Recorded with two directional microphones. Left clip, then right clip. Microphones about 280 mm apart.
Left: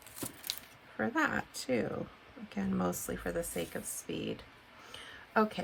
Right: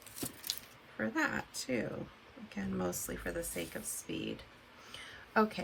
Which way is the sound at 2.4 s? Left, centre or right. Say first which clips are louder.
Left 3 dB; centre.